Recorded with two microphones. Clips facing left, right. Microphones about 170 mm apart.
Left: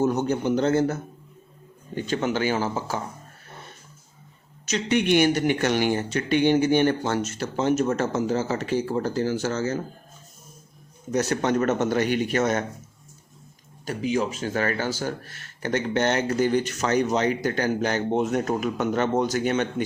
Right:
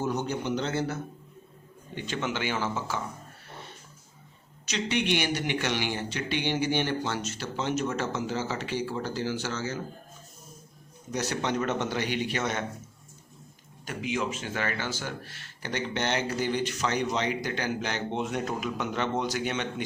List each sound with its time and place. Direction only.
0.0 s speech: 45° left (ahead or behind)
2.0 s speech: 40° left (ahead or behind)
4.6 s speech: 45° left (ahead or behind)
11.1 s speech: 50° left (ahead or behind)
13.8 s speech: 35° left (ahead or behind)